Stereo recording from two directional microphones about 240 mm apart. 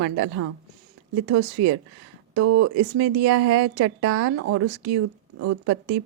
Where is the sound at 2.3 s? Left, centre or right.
Right.